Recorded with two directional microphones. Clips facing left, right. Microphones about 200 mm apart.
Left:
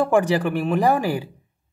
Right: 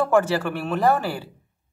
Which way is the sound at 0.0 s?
15° left (ahead or behind).